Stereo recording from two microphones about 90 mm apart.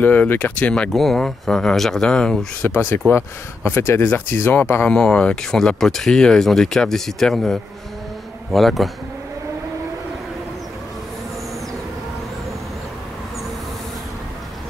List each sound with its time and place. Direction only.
0.0 s speech: 20° left (ahead or behind)
0.9 s speech: 5° left (ahead or behind)
2.7 s speech: 25° left (ahead or behind)
4.8 s speech: 10° left (ahead or behind)